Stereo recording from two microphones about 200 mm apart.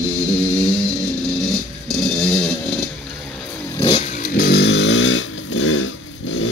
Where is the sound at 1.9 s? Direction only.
Centre (ahead or behind).